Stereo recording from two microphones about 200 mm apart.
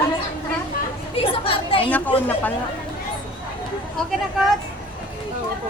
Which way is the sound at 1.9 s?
10° left (ahead or behind).